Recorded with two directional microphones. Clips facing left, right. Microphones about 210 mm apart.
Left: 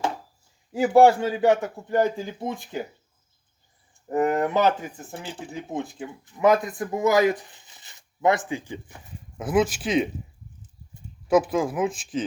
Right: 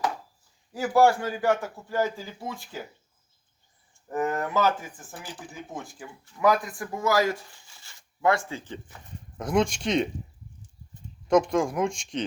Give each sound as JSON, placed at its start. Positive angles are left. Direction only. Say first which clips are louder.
{"t": 0.7, "sound": "speech", "louder": "left 5 dB", "side_deg": 20}
{"t": 4.1, "sound": "speech", "louder": "left 5 dB", "side_deg": 20}
{"t": 11.3, "sound": "speech", "louder": "left 1 dB", "side_deg": 5}